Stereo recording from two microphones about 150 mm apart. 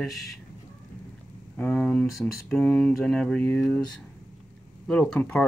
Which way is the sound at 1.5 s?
10° left (ahead or behind).